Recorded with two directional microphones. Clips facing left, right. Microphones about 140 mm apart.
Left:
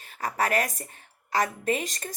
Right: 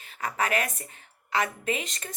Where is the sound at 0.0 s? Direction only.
40° left (ahead or behind).